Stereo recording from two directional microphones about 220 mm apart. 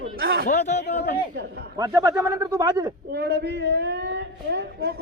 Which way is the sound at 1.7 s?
15° right (ahead or behind).